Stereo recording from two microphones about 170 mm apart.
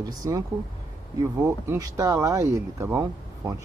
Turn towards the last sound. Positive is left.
turn(degrees=-20)  # may be behind; listen again after turning